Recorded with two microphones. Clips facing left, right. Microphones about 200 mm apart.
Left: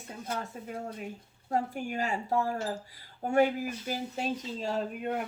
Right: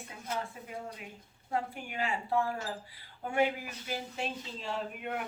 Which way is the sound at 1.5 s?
45° left (ahead or behind).